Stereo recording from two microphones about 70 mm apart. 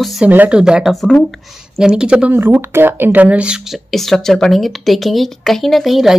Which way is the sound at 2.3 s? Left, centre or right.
Right.